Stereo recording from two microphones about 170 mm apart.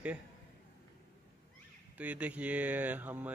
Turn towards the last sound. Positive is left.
turn(degrees=-10)  # may be behind; listen again after turning